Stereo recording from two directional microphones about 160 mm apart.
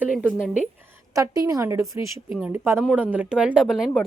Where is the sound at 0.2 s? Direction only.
10° right (ahead or behind).